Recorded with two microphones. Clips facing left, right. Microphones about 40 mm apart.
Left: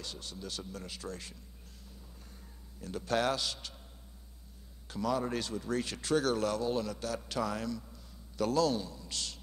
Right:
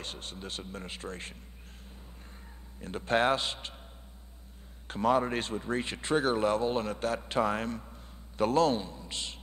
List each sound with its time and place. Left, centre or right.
0.0 s speech: right
2.8 s speech: right
4.8 s speech: right